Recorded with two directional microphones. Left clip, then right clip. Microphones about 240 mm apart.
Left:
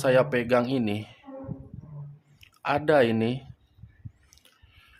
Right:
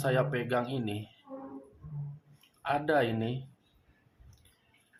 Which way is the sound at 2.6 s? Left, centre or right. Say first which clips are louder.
Left 7 dB; left.